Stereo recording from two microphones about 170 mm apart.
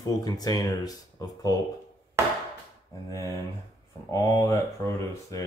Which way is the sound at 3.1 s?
20° left (ahead or behind).